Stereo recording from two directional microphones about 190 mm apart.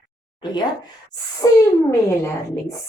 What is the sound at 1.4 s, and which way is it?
A woman's voice, 20° left (ahead or behind).